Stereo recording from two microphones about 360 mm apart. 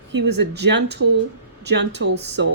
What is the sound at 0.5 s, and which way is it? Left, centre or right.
Speech, right.